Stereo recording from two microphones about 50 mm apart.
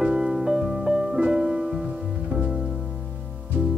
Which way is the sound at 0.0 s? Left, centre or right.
Centre.